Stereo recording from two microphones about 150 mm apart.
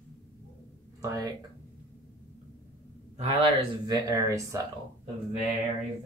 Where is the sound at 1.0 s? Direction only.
20° right (ahead or behind).